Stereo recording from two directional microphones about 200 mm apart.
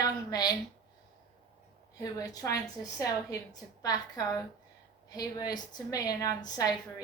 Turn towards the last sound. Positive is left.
turn(degrees=20)  # may be behind; listen again after turning